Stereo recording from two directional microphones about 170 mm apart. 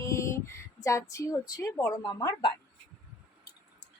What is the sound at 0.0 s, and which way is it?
Speech, 15° left (ahead or behind).